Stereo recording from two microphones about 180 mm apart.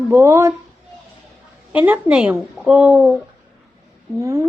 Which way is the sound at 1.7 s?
10° right (ahead or behind).